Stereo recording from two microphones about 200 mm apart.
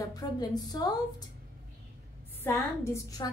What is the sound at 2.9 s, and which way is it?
Speech, 20° left (ahead or behind).